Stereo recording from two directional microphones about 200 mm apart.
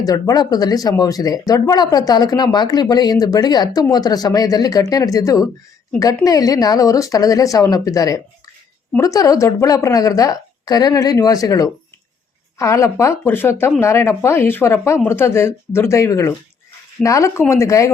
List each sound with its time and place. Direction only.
0.0 s speech: 20° left (ahead or behind)